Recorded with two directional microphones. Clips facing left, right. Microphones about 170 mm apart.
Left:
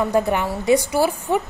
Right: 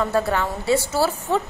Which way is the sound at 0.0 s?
15° left (ahead or behind).